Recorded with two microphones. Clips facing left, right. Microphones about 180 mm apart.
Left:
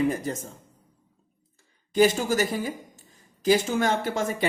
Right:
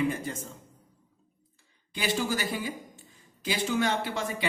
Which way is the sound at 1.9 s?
45° left (ahead or behind).